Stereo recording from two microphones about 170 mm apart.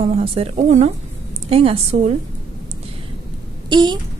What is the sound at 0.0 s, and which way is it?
A woman's voice, 35° right (ahead or behind).